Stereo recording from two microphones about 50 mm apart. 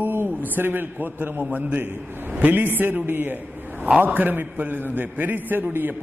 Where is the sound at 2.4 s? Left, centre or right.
Right.